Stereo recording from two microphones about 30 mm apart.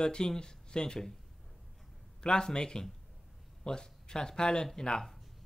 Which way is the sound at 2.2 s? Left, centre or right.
Left.